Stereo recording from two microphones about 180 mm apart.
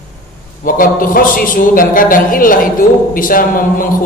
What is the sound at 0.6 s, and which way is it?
A man's voice, 50° left (ahead or behind).